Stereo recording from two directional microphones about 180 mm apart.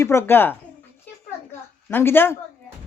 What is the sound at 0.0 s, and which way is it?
Speech, 15° left (ahead or behind).